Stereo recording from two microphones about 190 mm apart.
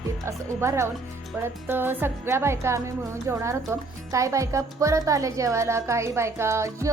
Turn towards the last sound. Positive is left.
turn(degrees=-15)  # may be behind; listen again after turning